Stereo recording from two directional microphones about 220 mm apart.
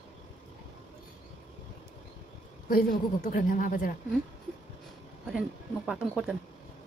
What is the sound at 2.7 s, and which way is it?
A woman's voice, 40° left (ahead or behind).